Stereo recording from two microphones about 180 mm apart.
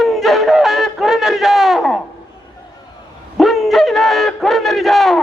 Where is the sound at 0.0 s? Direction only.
Centre (ahead or behind).